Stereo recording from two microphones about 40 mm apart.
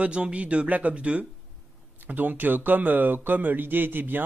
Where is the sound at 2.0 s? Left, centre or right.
Right.